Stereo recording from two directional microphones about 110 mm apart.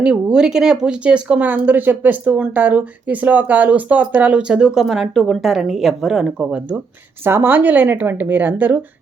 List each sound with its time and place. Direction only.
0.0 s speech: 10° right (ahead or behind)